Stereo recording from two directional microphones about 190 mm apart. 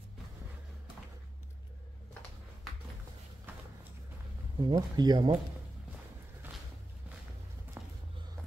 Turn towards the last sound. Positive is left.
turn(degrees=-10)  # may be behind; listen again after turning